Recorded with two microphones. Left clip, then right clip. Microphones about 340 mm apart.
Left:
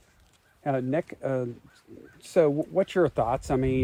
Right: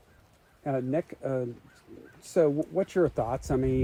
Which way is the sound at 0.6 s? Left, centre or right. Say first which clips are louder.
Left 2 dB; left.